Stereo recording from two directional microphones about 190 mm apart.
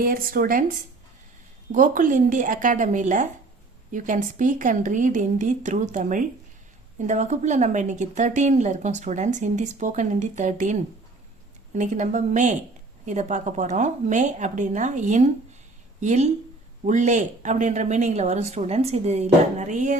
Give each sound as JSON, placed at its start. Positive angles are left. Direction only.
{"t": 0.0, "sound": "a woman's voice", "side_deg": -50}